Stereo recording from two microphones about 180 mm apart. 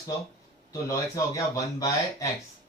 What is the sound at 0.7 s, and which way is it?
Speech, 20° left (ahead or behind).